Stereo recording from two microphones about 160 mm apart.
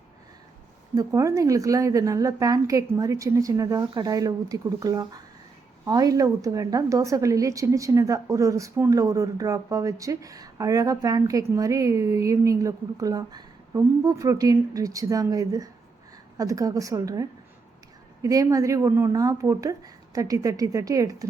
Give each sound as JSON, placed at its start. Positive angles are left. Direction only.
{"t": 0.9, "sound": "a woman's voice", "side_deg": -20}